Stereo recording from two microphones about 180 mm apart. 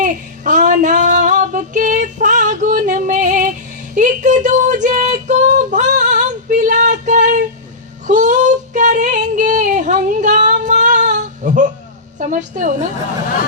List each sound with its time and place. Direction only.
0.0 s female singing: 45° right (ahead or behind)
12.2 s a woman's voice: 45° right (ahead or behind)